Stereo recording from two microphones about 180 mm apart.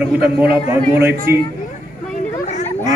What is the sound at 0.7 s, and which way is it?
Speech, 15° right (ahead or behind).